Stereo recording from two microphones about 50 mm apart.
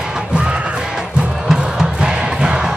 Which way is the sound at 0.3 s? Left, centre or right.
Right.